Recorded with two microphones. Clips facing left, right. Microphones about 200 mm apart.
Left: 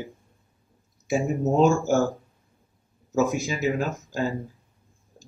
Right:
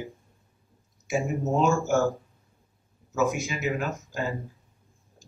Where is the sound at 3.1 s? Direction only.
30° left (ahead or behind).